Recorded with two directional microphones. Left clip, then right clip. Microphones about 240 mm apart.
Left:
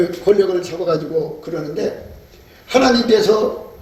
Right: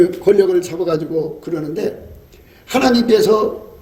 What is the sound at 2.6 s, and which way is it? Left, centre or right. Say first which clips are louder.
Speech: left 2 dB; right.